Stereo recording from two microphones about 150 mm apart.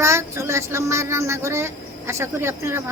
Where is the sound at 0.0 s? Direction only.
20° right (ahead or behind).